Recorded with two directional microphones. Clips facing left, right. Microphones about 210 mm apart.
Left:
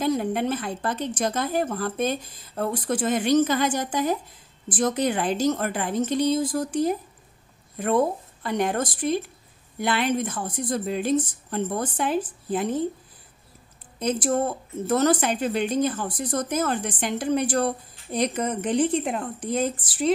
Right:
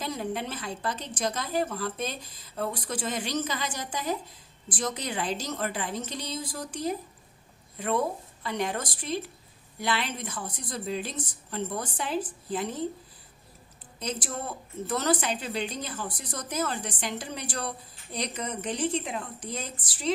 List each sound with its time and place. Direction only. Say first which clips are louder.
0.0 s a woman's voice: left 9 dB; 55° left (ahead or behind)
13.9 s a woman's voice: left 11 dB; 55° left (ahead or behind)